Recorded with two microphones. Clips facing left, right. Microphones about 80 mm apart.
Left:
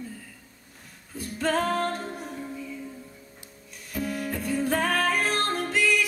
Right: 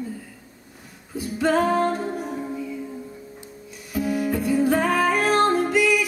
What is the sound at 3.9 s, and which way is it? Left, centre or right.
Music, centre.